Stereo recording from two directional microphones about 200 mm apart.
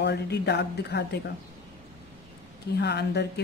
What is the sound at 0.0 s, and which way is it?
Speech, 55° left (ahead or behind).